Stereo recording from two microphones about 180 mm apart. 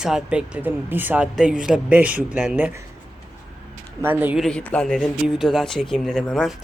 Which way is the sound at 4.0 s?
10° right (ahead or behind).